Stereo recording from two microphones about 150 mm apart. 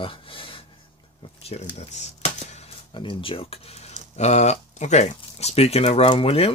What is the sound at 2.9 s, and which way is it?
Speech, 35° left (ahead or behind).